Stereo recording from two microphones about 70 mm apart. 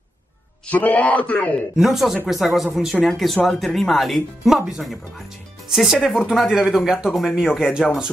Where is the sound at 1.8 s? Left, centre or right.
Centre.